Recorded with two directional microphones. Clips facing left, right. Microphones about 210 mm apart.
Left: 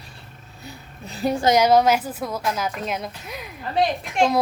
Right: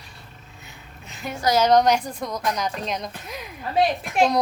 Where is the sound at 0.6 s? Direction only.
35° left (ahead or behind).